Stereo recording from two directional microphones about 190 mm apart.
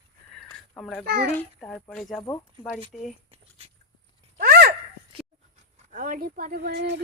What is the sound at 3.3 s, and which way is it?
Dog, 30° right (ahead or behind).